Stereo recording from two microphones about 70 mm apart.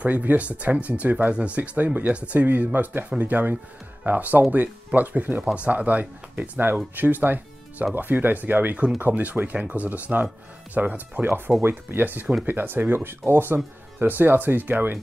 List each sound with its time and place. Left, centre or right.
0.0 s speech: right